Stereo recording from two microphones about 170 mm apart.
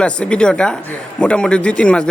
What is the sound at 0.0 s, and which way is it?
A man's voice, 5° left (ahead or behind).